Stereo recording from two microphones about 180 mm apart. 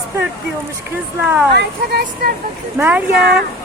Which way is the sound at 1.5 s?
60° right (ahead or behind).